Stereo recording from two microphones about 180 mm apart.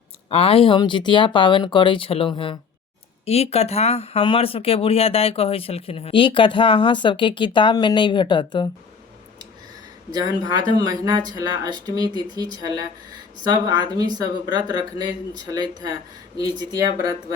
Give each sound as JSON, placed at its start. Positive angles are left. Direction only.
{"t": 0.3, "sound": "speech", "side_deg": 35}
{"t": 10.1, "sound": "speech", "side_deg": -20}